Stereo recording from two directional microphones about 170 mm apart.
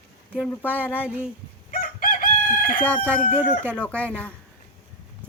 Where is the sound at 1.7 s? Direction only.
55° left (ahead or behind).